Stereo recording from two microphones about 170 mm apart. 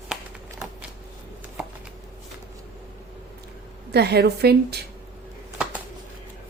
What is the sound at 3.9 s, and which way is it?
Speech, 75° right (ahead or behind).